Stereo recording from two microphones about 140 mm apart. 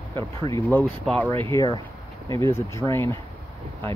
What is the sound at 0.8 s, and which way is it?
Speech, centre (ahead or behind).